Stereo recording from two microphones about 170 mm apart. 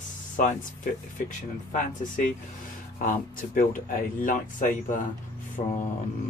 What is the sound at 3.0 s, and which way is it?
Speech, 50° left (ahead or behind).